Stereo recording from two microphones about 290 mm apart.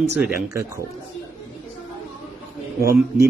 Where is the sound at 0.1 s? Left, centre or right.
Centre.